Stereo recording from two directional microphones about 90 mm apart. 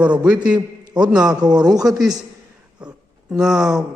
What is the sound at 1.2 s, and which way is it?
Speech, 50° right (ahead or behind).